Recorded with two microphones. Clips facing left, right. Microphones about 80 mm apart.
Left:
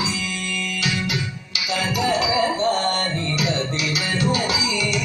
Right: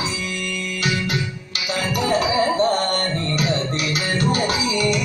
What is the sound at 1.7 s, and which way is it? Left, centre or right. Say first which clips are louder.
Music: right 1 dB; right.